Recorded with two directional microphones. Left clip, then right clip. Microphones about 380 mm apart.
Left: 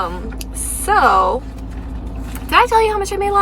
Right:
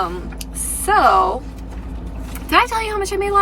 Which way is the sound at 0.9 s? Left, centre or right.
Centre.